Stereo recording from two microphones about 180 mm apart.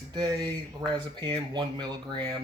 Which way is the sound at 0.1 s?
25° right (ahead or behind).